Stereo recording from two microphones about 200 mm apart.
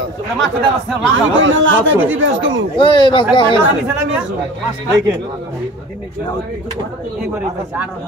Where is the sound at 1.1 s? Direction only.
70° right (ahead or behind).